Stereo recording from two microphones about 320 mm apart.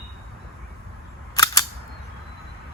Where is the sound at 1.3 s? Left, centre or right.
Centre.